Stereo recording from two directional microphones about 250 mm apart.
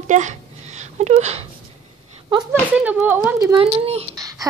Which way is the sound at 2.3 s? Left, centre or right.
Centre.